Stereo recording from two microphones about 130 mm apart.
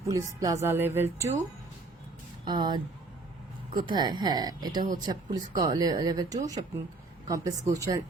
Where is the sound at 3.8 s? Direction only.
35° right (ahead or behind).